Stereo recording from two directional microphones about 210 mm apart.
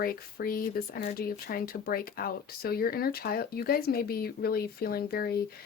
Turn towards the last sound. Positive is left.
turn(degrees=45)  # may be behind; listen again after turning